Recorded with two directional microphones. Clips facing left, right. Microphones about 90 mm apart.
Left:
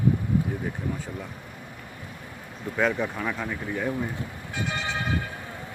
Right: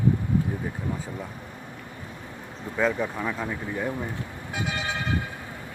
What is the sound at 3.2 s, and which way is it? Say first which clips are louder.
Speech: even; 10° right (ahead or behind).